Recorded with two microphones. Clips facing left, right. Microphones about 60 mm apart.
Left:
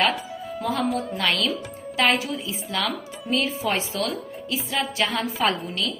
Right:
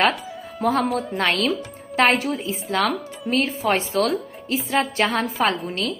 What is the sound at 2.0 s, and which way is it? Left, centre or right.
Music, right.